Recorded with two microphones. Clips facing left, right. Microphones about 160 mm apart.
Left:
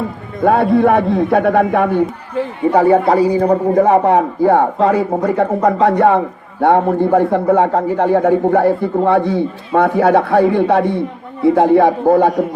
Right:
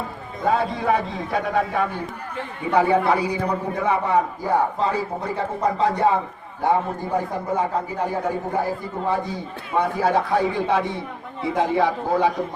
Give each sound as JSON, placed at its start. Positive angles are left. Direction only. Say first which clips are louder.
{"t": 0.3, "sound": "a man's voice", "louder": "left 10 dB", "side_deg": 60}